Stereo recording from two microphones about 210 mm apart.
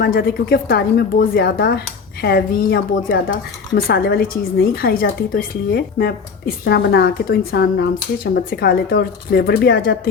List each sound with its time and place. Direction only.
0.0 s a woman's voice: 45° left (ahead or behind)